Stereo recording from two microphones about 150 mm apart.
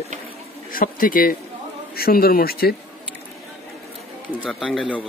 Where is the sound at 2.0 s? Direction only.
90° left.